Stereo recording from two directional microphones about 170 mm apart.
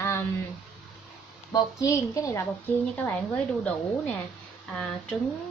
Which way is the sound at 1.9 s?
20° left (ahead or behind).